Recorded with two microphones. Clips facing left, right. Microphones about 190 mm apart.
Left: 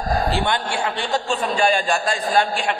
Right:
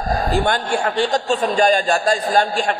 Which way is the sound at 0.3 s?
45° right (ahead or behind).